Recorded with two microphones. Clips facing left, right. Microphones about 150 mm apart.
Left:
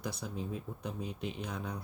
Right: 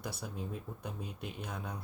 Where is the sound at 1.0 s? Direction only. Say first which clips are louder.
Left 4 dB; 55° right (ahead or behind).